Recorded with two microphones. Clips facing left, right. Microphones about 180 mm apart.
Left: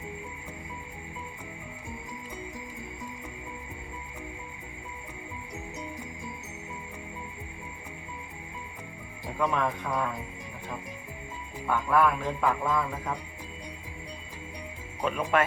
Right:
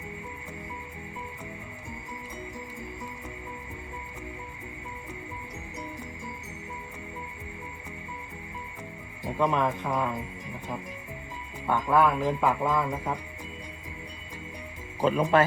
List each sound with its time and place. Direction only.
9.4 s speech: 20° right (ahead or behind)
11.7 s speech: 20° right (ahead or behind)
15.0 s speech: 30° right (ahead or behind)